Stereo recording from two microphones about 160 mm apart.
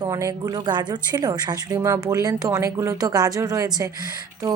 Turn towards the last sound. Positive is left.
turn(degrees=-20)  # may be behind; listen again after turning